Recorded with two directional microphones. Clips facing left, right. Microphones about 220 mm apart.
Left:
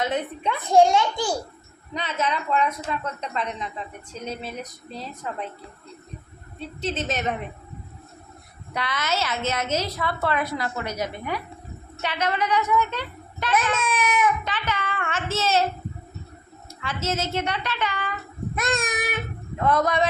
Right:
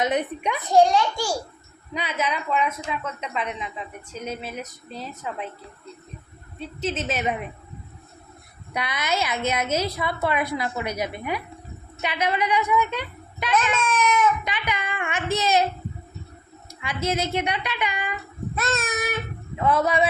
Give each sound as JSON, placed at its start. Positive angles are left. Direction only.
{"t": 0.0, "sound": "a woman's voice", "side_deg": -15}
{"t": 0.9, "sound": "a child's voice", "side_deg": 20}
{"t": 1.9, "sound": "a woman's voice", "side_deg": -10}
{"t": 6.8, "sound": "a woman's voice", "side_deg": -10}
{"t": 8.7, "sound": "a woman's voice", "side_deg": -10}
{"t": 13.8, "sound": "child singing", "side_deg": 10}
{"t": 14.4, "sound": "a woman's voice", "side_deg": -15}
{"t": 16.8, "sound": "a woman's voice", "side_deg": -15}
{"t": 18.5, "sound": "child singing", "side_deg": 15}
{"t": 19.5, "sound": "a woman's voice", "side_deg": -5}